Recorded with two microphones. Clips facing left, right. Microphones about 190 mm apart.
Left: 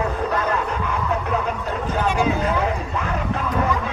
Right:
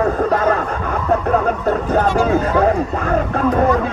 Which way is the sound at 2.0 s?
50° right (ahead or behind).